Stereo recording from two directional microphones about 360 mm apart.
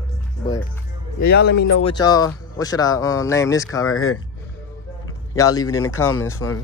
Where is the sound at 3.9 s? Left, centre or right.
Left.